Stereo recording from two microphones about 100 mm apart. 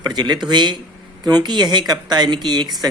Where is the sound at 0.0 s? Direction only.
45° right (ahead or behind).